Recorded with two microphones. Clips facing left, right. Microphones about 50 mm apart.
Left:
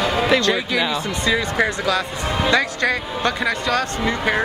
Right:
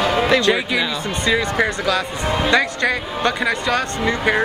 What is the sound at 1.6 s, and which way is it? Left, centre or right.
Speech, centre.